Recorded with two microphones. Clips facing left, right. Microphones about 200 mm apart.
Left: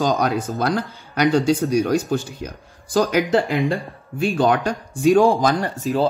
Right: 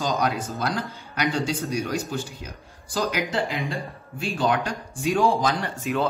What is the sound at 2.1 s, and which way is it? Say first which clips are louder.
Speech: left 8 dB; 55° left (ahead or behind).